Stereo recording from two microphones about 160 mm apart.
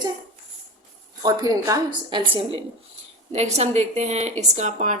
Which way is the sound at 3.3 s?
45° right (ahead or behind).